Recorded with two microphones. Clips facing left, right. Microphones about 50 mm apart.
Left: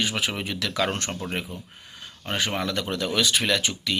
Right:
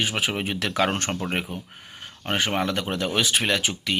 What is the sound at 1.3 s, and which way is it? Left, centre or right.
Speech, right.